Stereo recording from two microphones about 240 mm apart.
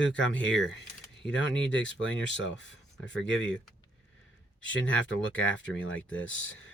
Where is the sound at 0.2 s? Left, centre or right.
Left.